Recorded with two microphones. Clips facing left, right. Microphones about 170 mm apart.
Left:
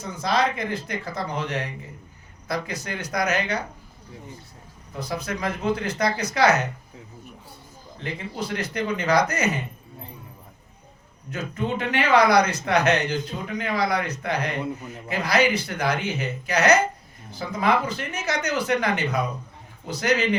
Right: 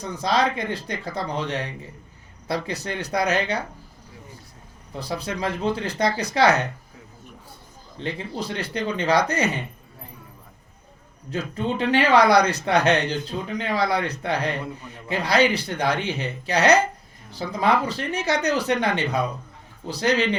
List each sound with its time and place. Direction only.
0.0 s speech: 30° right (ahead or behind)
4.9 s speech: 30° right (ahead or behind)
7.9 s speech: 30° right (ahead or behind)
11.3 s speech: 30° right (ahead or behind)